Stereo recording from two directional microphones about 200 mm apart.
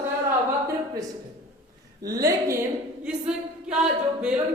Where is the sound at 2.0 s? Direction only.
15° right (ahead or behind).